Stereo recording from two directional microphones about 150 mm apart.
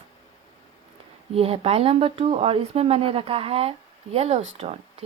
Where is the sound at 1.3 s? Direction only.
40° right (ahead or behind).